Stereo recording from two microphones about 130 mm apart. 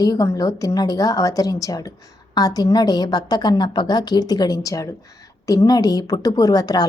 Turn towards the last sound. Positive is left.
turn(degrees=30)  # may be behind; listen again after turning